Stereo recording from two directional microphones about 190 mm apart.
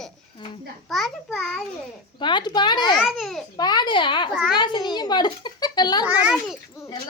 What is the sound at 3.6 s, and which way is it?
Speech, 20° left (ahead or behind).